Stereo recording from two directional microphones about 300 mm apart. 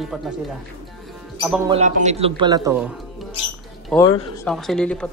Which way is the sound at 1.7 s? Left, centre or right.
Right.